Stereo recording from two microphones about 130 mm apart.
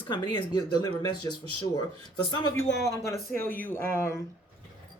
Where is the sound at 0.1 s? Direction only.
40° left (ahead or behind).